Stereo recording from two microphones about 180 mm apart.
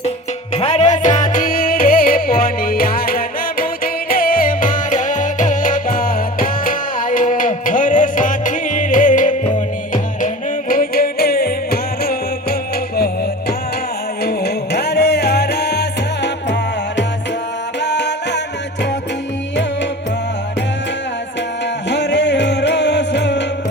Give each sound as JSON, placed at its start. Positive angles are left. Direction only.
{"t": 0.5, "sound": "music", "side_deg": 35}
{"t": 14.3, "sound": "music", "side_deg": 65}
{"t": 17.8, "sound": "music", "side_deg": 75}
{"t": 21.8, "sound": "music", "side_deg": 75}